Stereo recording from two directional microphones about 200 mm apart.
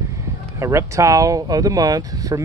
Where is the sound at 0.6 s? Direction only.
15° right (ahead or behind).